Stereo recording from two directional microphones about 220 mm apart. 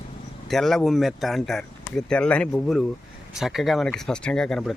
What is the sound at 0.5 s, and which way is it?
Speech, centre (ahead or behind).